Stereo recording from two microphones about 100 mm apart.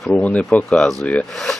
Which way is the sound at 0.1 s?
15° left (ahead or behind).